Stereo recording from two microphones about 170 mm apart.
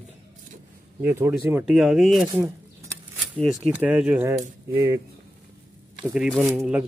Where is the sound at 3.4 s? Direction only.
Centre (ahead or behind).